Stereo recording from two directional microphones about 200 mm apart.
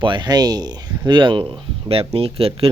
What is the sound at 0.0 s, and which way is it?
Speech, 25° right (ahead or behind).